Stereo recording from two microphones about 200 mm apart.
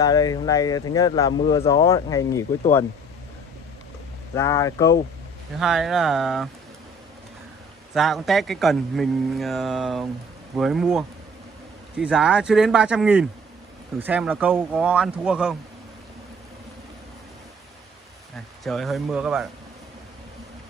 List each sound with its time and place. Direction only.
0.0 s speech: 20° left (ahead or behind)
4.4 s speech: 15° left (ahead or behind)
5.6 s a man's voice: centre (ahead or behind)
7.9 s a man's voice: centre (ahead or behind)
18.6 s a man's voice: centre (ahead or behind)